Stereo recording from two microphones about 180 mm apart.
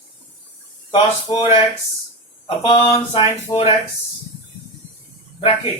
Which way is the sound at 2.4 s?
30° left (ahead or behind).